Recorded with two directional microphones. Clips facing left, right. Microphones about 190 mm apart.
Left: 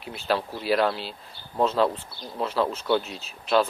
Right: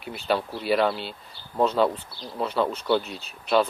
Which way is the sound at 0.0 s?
Centre (ahead or behind).